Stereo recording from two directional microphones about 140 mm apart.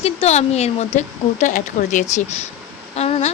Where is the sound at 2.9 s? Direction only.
50° left (ahead or behind).